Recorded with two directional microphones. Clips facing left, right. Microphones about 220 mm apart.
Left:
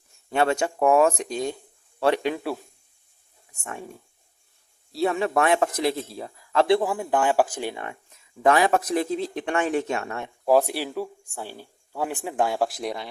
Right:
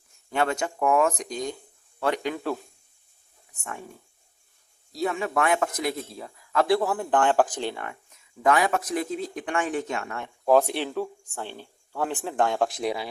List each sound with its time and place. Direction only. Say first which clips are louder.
0.3 s speech: left 3 dB; 25° left (ahead or behind)
4.9 s speech: left 4 dB; 35° left (ahead or behind); by 7.9 s 15° left (ahead or behind)
8.4 s speech: left 3 dB; 30° left (ahead or behind)
10.4 s speech: even; 10° left (ahead or behind)